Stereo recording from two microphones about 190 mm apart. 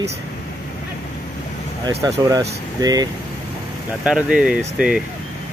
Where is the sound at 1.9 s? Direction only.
15° right (ahead or behind).